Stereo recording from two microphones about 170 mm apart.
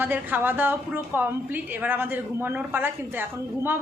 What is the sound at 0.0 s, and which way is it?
A woman's voice, 10° right (ahead or behind).